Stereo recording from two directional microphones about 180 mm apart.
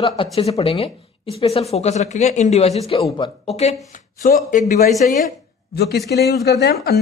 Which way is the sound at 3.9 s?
45° left (ahead or behind).